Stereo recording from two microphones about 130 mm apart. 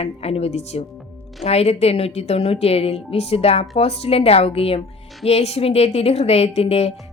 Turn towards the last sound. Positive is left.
turn(degrees=55)  # may be behind; listen again after turning